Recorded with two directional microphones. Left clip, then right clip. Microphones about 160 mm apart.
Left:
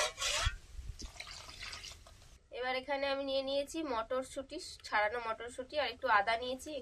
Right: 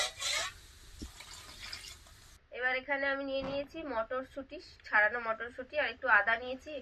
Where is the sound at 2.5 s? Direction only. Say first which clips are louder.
Right 3 dB; 30° left (ahead or behind).